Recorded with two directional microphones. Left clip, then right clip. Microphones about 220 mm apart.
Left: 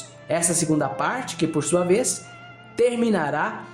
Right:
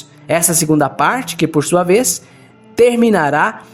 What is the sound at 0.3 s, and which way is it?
A man's voice, 40° right (ahead or behind).